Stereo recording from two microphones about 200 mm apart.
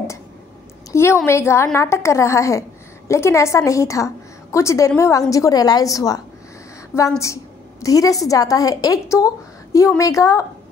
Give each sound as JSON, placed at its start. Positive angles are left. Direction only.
{"t": 0.9, "sound": "a woman's voice", "side_deg": 15}